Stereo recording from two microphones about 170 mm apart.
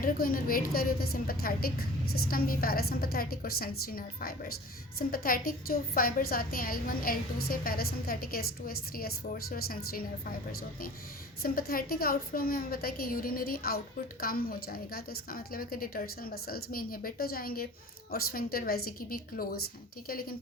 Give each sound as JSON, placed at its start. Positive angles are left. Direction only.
{"t": 0.0, "sound": "a woman's voice", "side_deg": 55}